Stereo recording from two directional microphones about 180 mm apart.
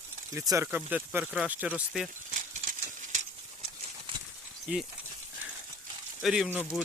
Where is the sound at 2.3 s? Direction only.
45° right (ahead or behind).